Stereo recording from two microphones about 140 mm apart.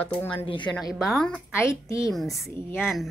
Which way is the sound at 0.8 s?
Centre (ahead or behind).